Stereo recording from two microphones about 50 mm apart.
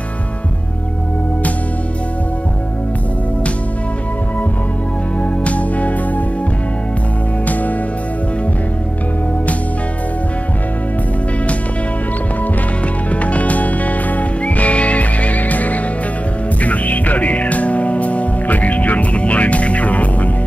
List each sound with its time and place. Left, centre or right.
5.4 s music: left
13.1 s music: left